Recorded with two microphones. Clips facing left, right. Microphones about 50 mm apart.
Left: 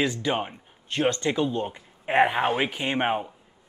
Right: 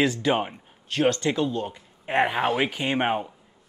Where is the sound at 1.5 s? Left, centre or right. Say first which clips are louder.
Left 1 dB; left.